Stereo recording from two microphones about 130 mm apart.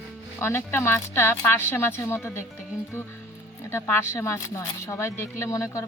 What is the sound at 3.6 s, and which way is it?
Speech, 20° left (ahead or behind).